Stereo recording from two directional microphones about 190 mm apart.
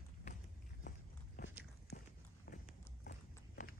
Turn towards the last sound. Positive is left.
turn(degrees=50)  # may be behind; listen again after turning